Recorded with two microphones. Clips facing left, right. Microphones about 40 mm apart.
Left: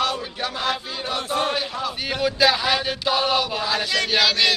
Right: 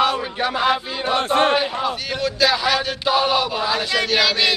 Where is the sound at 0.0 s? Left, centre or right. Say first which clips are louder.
Right 5 dB; centre.